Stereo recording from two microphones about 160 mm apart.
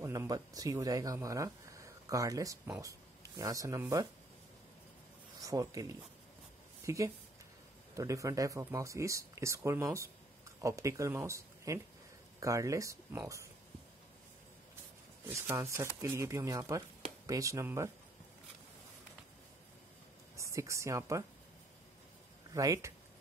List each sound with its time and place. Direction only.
0.0 s speech: 20° right (ahead or behind)
5.4 s speech: 20° right (ahead or behind)
6.8 s a sound: 20° right (ahead or behind)
7.9 s speech: 20° right (ahead or behind)
15.2 s speech: 15° right (ahead or behind)
20.3 s speech: 20° right (ahead or behind)
22.5 s speech: 20° right (ahead or behind)